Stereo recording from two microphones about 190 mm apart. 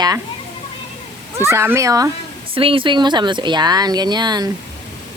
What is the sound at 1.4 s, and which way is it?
Speech, 15° right (ahead or behind).